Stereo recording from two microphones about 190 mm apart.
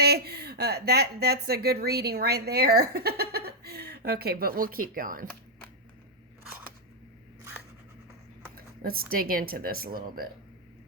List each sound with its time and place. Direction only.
0.0 s a woman's voice: 55° right (ahead or behind)
8.5 s speech: 50° right (ahead or behind)